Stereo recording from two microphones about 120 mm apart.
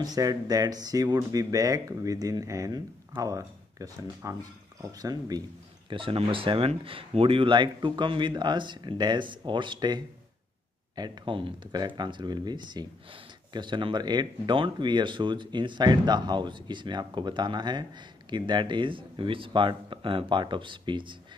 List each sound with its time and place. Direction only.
0.0 s speech: 30° right (ahead or behind)
5.9 s speech: 50° right (ahead or behind)